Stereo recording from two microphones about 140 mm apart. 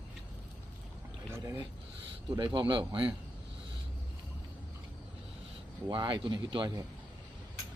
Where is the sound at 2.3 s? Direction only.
35° right (ahead or behind).